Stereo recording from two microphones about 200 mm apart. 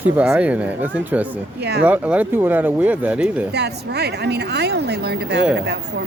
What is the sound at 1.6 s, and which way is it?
Speech, 55° right (ahead or behind).